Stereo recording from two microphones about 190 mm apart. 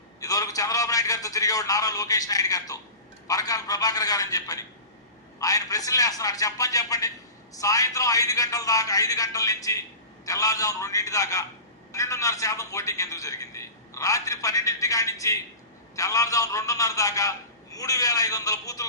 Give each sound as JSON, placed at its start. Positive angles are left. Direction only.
{"t": 0.2, "sound": "a man's voice", "side_deg": 20}